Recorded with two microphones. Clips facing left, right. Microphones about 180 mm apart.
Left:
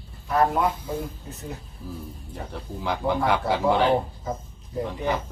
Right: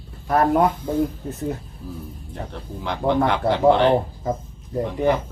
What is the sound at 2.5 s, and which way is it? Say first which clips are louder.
Speech: left 2 dB; 5° left (ahead or behind).